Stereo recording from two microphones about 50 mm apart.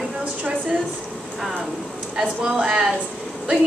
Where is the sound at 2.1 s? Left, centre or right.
Centre.